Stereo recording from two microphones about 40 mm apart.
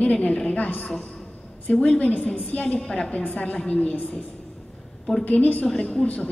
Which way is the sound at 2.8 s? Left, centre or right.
Left.